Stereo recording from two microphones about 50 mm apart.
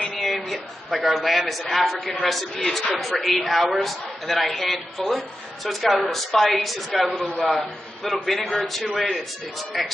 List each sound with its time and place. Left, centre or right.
0.0 s a sound: centre
1.7 s a man's voice: centre
8.4 s a man's voice: left